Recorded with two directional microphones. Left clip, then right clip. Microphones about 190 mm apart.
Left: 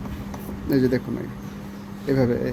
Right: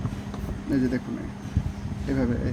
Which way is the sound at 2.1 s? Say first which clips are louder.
Left 6 dB; 35° left (ahead or behind).